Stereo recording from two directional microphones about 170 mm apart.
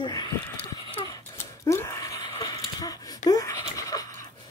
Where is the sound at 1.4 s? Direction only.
15° left (ahead or behind).